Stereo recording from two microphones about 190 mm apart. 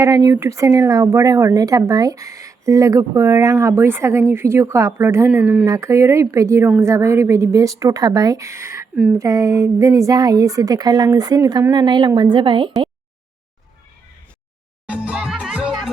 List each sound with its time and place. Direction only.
0.0 s speech: 15° right (ahead or behind)
14.8 s music: 5° right (ahead or behind)